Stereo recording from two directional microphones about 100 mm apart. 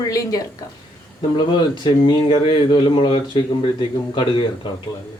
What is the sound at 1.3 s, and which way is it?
Speech, 50° left (ahead or behind).